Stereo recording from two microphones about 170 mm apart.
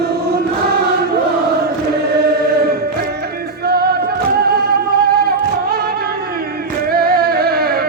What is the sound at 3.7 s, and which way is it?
Music, 65° right (ahead or behind).